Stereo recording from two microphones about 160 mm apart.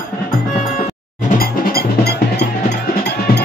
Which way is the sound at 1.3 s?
70° left (ahead or behind).